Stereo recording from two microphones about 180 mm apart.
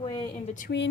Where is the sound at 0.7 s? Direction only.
65° left (ahead or behind).